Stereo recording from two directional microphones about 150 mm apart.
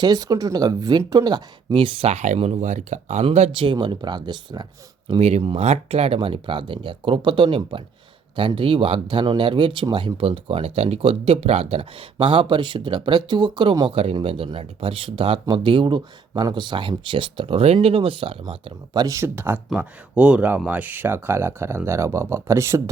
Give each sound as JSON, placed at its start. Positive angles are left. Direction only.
{"t": 0.0, "sound": "speech", "side_deg": -25}
{"t": 3.2, "sound": "speech", "side_deg": -40}
{"t": 18.9, "sound": "speech", "side_deg": -20}